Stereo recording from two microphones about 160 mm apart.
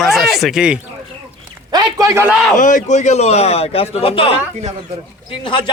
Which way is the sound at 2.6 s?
55° left (ahead or behind).